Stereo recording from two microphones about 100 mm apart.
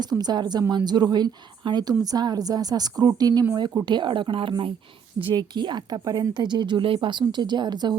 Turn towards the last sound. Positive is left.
turn(degrees=-45)  # may be behind; listen again after turning